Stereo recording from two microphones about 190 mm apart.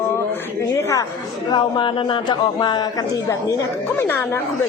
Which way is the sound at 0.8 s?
15° left (ahead or behind).